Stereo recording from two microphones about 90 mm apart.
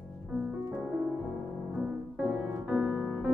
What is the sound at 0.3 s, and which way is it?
Music, 5° right (ahead or behind).